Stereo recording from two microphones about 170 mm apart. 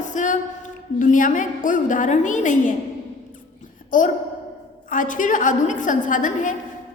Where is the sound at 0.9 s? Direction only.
50° left (ahead or behind).